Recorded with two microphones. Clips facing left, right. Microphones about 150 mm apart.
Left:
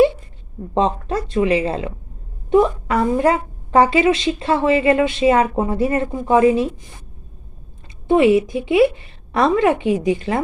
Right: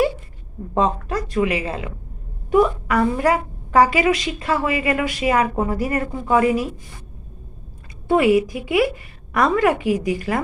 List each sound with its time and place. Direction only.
0.7 s a woman's voice: 25° left (ahead or behind)
8.0 s a woman's voice: 25° left (ahead or behind)